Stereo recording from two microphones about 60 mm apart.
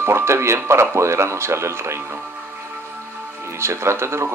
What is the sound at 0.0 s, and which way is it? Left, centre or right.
Speech, right.